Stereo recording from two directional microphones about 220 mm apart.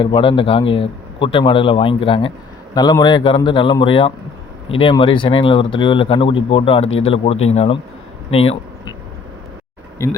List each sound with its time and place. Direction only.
0.0 s speech: 25° left (ahead or behind)
10.0 s speech: 15° left (ahead or behind)